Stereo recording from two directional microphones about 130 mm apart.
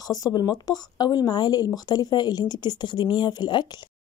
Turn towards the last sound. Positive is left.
turn(degrees=35)  # may be behind; listen again after turning